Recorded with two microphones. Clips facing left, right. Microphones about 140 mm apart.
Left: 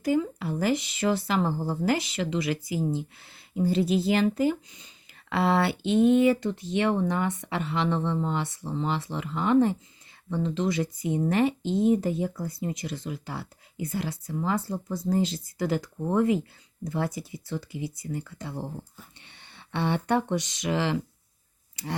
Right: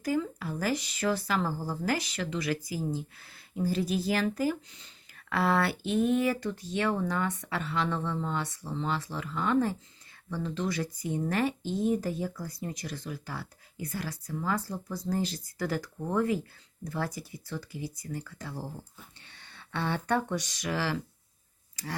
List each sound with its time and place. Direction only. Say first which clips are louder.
0.0 s speech: left 5 dB; 25° left (ahead or behind)
11.6 s speech: left 5 dB; 70° left (ahead or behind)
11.9 s speech: left 5 dB; 20° left (ahead or behind)